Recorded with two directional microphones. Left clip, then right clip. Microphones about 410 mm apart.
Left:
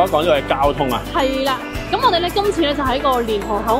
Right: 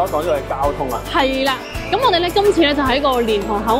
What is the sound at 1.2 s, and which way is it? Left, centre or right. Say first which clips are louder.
Speech: right 2 dB; centre.